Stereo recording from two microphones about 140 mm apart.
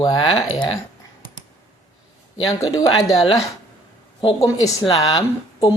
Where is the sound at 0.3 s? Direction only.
40° left (ahead or behind).